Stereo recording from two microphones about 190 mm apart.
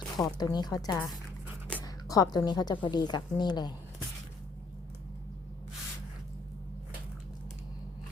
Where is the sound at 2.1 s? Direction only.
20° left (ahead or behind).